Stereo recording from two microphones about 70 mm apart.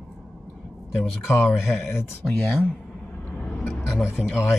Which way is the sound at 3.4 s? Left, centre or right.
Centre.